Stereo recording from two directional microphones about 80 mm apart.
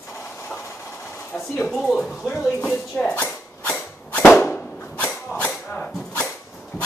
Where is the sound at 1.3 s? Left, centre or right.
Centre.